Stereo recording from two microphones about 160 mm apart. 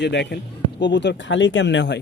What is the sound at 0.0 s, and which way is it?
A man's voice, 90° left.